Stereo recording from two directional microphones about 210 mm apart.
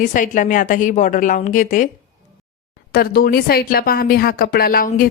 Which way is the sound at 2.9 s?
45° left (ahead or behind).